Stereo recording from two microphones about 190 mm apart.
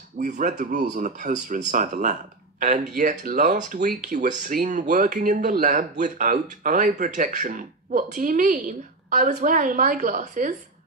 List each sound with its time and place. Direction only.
0.2 s speech: 40° right (ahead or behind)